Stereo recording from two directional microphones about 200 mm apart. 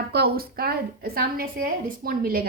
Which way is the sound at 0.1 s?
50° right (ahead or behind).